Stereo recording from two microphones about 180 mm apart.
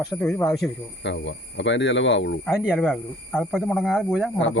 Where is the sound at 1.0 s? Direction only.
90° left.